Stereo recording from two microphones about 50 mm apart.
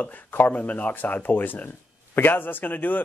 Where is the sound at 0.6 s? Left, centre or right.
Left.